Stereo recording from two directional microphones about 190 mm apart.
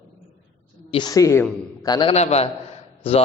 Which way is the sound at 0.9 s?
20° left (ahead or behind).